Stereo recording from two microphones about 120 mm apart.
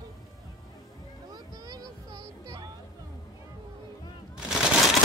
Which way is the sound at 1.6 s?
30° right (ahead or behind).